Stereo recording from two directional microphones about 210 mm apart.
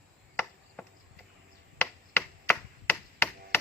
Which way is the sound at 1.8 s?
10° left (ahead or behind).